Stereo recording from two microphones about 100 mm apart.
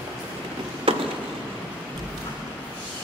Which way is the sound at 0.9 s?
70° right (ahead or behind).